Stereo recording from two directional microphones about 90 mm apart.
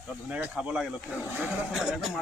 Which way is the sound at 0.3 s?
15° right (ahead or behind).